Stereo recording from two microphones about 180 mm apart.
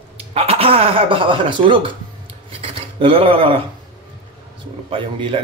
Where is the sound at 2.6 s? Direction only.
30° right (ahead or behind).